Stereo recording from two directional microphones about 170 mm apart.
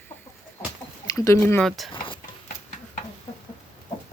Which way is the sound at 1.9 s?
30° left (ahead or behind).